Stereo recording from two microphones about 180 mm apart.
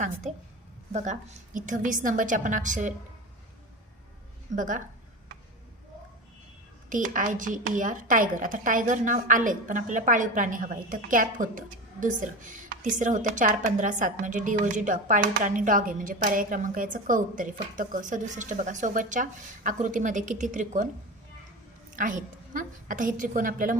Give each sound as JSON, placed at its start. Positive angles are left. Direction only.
{"t": 0.9, "sound": "a woman's voice", "side_deg": -40}
{"t": 4.5, "sound": "a woman's voice", "side_deg": -45}
{"t": 6.9, "sound": "a woman's voice", "side_deg": -45}
{"t": 21.9, "sound": "a woman's voice", "side_deg": -45}